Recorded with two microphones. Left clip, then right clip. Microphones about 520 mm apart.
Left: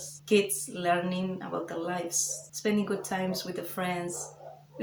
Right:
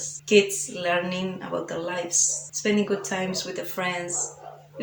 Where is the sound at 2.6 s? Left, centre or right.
Left.